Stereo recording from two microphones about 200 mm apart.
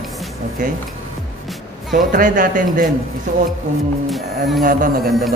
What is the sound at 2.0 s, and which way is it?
Speech, 40° right (ahead or behind).